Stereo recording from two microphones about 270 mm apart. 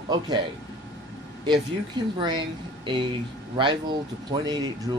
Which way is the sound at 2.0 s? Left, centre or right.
Centre.